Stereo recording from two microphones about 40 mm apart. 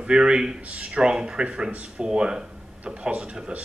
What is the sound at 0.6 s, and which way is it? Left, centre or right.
Speech, right.